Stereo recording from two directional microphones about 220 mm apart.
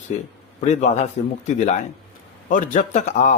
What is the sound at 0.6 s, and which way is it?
A man's voice, 30° left (ahead or behind).